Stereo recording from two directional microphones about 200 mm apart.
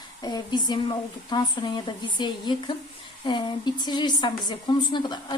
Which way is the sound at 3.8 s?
20° left (ahead or behind).